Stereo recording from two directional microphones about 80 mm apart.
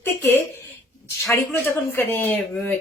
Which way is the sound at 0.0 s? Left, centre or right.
Left.